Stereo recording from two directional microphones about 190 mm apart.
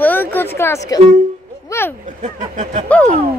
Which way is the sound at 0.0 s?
10° left (ahead or behind).